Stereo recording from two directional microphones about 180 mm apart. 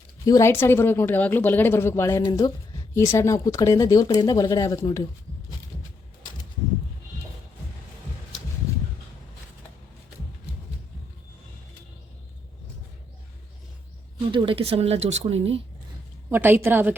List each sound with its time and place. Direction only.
0.3 s speech: 15° left (ahead or behind)
14.3 s speech: 30° right (ahead or behind)
16.3 s a woman's voice: 10° right (ahead or behind)